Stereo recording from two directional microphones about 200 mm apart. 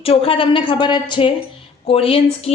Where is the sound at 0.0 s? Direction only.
30° left (ahead or behind).